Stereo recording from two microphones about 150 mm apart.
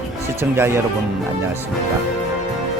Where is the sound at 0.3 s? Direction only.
15° right (ahead or behind).